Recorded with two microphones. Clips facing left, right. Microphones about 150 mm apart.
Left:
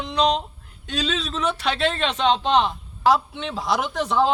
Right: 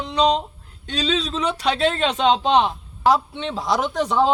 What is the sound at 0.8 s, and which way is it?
A man's voice, 5° left (ahead or behind).